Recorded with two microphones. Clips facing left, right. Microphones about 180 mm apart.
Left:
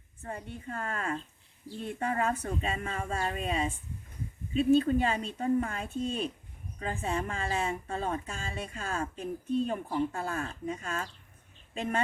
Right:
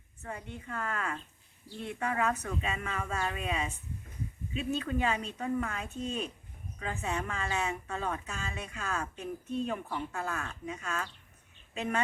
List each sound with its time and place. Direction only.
0.2 s a woman's voice: 35° left (ahead or behind)